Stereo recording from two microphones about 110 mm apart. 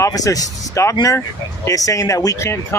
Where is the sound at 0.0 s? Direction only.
30° left (ahead or behind).